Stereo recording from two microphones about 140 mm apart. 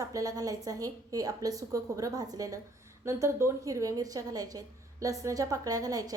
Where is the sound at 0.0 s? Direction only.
25° right (ahead or behind).